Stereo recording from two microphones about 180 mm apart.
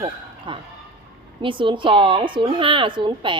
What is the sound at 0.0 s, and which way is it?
A woman's voice, 30° right (ahead or behind).